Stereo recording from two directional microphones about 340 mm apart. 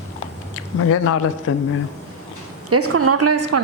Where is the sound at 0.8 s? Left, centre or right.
Left.